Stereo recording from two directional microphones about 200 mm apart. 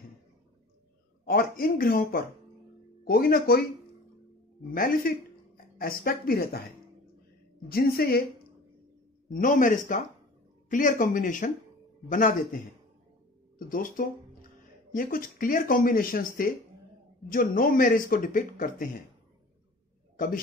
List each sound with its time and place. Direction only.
1.2 s speech: 45° left (ahead or behind)
4.6 s speech: 45° left (ahead or behind)
9.3 s speech: 40° left (ahead or behind)
13.7 s speech: 45° left (ahead or behind)